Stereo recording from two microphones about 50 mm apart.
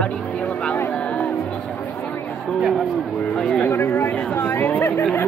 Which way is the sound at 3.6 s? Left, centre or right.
Left.